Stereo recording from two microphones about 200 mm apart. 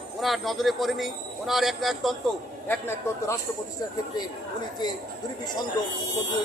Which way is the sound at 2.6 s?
10° left (ahead or behind).